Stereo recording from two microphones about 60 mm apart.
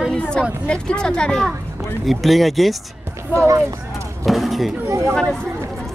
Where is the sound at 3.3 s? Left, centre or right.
Right.